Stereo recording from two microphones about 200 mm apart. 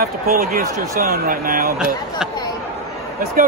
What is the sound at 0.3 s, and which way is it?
Speech, 45° right (ahead or behind).